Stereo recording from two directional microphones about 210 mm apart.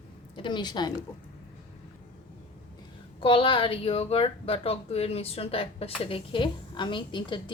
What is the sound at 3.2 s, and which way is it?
A woman's voice, 25° left (ahead or behind).